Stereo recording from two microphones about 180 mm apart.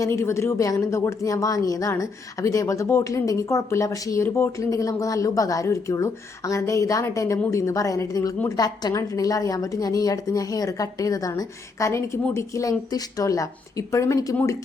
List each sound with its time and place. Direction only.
0.0 s a woman's voice: 15° left (ahead or behind)